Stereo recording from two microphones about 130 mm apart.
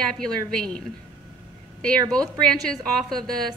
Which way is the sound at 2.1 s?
5° left (ahead or behind).